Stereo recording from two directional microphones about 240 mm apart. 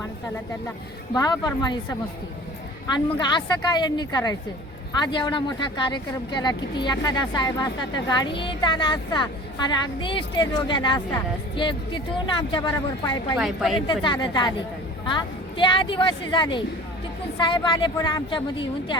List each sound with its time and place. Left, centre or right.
1.1 s a woman's voice: centre
3.2 s a woman's voice: centre
13.4 s a woman's voice: centre
13.7 s speech: centre